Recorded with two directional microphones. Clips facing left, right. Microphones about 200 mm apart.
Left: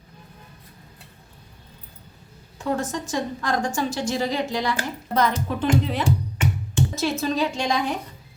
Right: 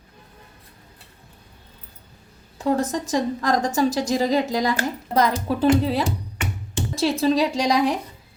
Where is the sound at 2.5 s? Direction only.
35° right (ahead or behind).